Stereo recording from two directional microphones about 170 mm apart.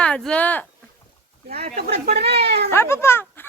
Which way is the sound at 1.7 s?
65° right (ahead or behind).